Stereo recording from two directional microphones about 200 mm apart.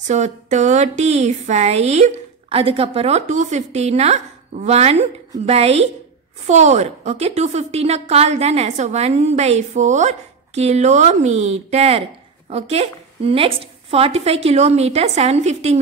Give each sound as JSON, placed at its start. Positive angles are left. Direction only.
{"t": 0.0, "sound": "speech", "side_deg": -35}